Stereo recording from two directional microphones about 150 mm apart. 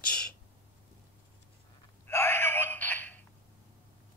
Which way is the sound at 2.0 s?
15° left (ahead or behind).